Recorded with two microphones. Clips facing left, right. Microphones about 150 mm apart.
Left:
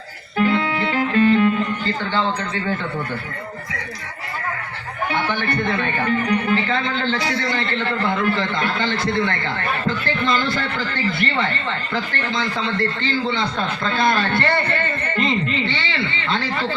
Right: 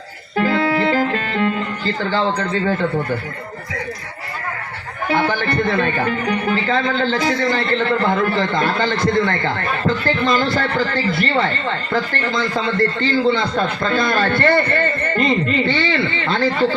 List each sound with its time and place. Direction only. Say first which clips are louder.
0.3 s music: right 2 dB; 40° right (ahead or behind)
2.0 s a man's voice: right 5 dB; 35° right (ahead or behind)
5.0 s a man's voice: right 4 dB; 35° right (ahead or behind)